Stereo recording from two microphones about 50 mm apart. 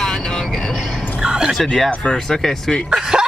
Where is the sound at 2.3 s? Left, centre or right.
Centre.